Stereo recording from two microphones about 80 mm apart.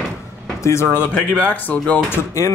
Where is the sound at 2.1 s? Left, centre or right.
Left.